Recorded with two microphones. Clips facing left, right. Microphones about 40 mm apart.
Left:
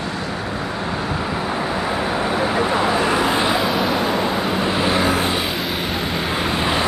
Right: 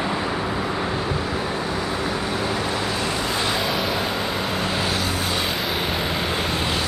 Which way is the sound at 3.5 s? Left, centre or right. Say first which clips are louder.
Left 4 dB; centre.